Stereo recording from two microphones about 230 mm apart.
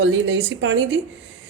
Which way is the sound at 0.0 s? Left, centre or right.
Right.